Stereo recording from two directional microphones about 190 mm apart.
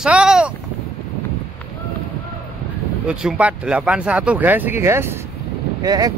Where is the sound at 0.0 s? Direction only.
5° right (ahead or behind).